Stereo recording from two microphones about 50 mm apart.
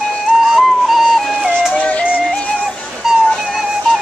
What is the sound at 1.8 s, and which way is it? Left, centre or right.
Music, left.